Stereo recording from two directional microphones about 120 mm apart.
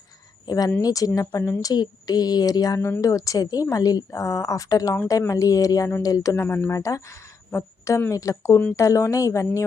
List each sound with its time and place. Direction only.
0.4 s speech: 30° left (ahead or behind)